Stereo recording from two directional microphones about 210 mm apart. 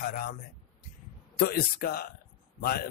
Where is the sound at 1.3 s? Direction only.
45° left (ahead or behind).